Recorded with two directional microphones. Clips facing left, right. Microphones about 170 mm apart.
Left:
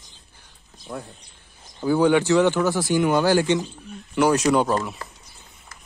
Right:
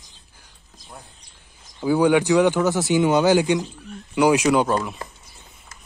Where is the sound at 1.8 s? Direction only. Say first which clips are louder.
Right 1 dB; 10° right (ahead or behind).